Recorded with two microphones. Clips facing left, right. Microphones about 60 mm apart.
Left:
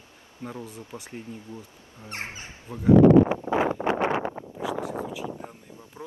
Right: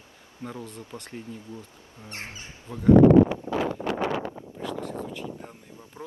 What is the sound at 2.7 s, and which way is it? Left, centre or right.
Speech, centre.